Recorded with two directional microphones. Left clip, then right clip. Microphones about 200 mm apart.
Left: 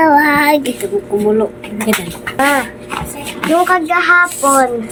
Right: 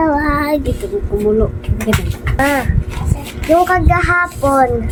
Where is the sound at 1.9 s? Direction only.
Centre (ahead or behind).